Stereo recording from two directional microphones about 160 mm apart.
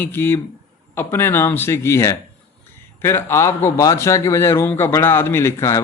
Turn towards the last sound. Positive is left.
turn(degrees=20)  # may be behind; listen again after turning